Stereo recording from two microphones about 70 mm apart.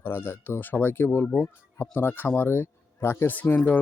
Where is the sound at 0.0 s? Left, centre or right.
Left.